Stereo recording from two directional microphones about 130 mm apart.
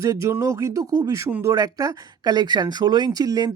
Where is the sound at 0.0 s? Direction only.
25° right (ahead or behind).